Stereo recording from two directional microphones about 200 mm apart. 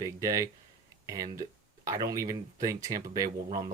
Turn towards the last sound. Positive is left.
turn(degrees=-15)  # may be behind; listen again after turning